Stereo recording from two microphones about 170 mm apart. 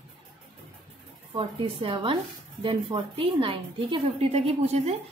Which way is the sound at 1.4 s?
30° right (ahead or behind).